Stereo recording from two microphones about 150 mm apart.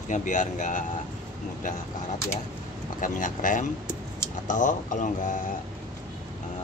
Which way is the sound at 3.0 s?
60° left (ahead or behind).